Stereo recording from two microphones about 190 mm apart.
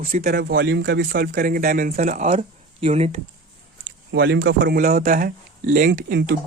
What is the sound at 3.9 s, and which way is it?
Speech, 70° right (ahead or behind).